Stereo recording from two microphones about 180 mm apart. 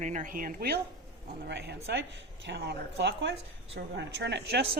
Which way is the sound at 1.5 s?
70° right (ahead or behind).